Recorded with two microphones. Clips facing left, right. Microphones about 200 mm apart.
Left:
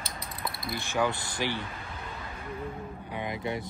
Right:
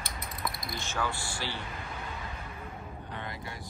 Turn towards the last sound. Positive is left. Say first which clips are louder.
# left 8 dB
turn(degrees=20)  # may be behind; listen again after turning